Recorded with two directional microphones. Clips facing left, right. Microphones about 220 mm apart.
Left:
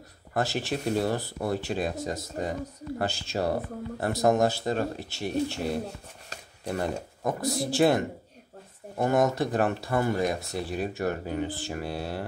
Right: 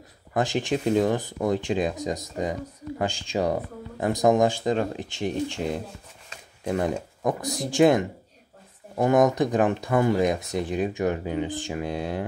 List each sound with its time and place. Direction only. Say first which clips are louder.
0.3 s speech: right 4 dB; 15° right (ahead or behind)